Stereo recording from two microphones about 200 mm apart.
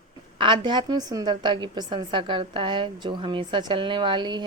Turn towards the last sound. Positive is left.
turn(degrees=-25)  # may be behind; listen again after turning